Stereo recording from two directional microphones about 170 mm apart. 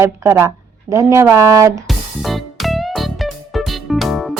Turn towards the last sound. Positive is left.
turn(degrees=0)  # may be behind; listen again after turning